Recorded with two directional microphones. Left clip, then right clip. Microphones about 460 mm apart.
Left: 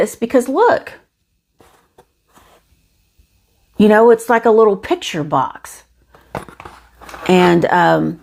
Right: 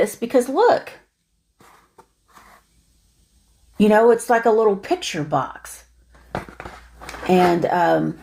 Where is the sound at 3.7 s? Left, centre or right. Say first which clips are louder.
Left 5 dB; left.